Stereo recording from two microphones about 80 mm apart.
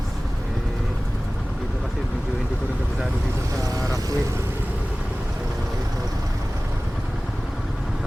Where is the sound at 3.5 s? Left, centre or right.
Right.